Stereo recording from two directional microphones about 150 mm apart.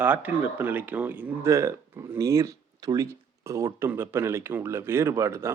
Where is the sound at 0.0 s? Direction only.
10° right (ahead or behind).